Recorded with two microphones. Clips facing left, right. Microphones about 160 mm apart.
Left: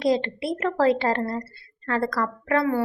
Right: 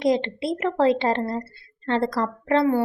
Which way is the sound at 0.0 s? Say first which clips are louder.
Right 1 dB; 20° right (ahead or behind).